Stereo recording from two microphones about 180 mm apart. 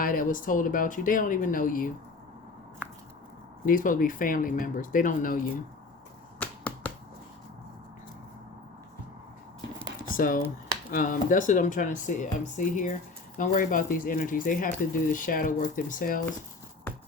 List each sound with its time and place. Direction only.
0.0 s speech: 50° left (ahead or behind)
3.7 s speech: 50° left (ahead or behind)
6.4 s finger snapping: 10° left (ahead or behind)
10.0 s a sound: 50° left (ahead or behind)
10.9 s speech: 50° left (ahead or behind)